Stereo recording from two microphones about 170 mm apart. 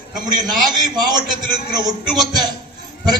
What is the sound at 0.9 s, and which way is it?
A man's voice, 25° right (ahead or behind).